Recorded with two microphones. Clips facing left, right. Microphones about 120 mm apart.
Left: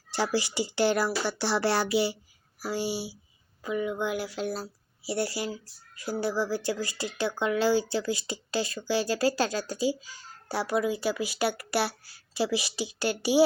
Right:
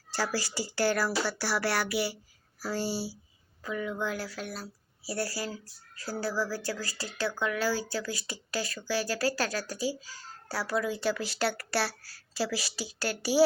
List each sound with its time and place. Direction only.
0.1 s speech: 20° left (ahead or behind)
2.6 s speech: 15° left (ahead or behind)
4.4 s a woman's voice: 35° left (ahead or behind)
5.0 s speech: 25° left (ahead or behind)